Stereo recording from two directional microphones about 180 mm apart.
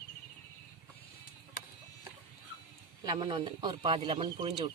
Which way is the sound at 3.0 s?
25° right (ahead or behind).